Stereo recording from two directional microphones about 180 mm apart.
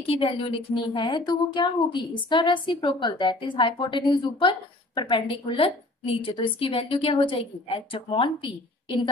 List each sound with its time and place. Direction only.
0.0 s a woman's voice: 30° left (ahead or behind)